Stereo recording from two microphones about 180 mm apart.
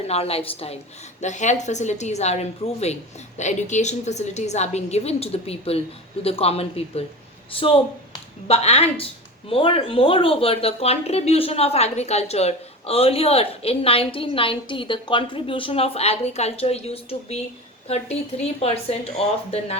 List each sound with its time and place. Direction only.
0.1 s speech: 35° left (ahead or behind)